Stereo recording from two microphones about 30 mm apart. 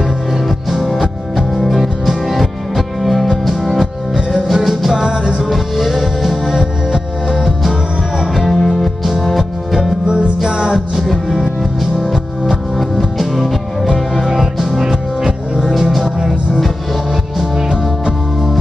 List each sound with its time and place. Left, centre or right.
0.3 s music: centre
4.9 s music: right
5.4 s music: centre
8.5 s music: centre
9.4 s music: centre
10.0 s music: right
10.4 s music: right
12.7 s music: centre
14.2 s music: centre
17.1 s music: centre